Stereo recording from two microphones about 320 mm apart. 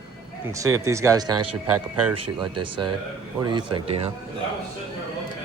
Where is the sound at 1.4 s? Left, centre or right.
Right.